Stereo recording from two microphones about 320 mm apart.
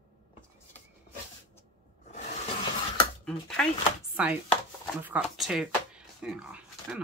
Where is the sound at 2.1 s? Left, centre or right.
Left.